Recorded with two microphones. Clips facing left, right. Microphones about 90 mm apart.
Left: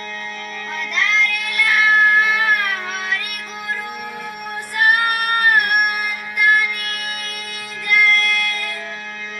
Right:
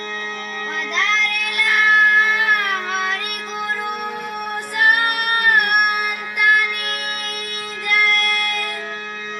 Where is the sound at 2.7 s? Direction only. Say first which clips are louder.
Right 2 dB; 60° right (ahead or behind).